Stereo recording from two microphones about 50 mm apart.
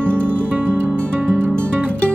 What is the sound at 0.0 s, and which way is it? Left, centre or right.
Music, right.